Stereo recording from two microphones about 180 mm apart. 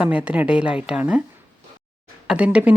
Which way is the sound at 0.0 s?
10° right (ahead or behind).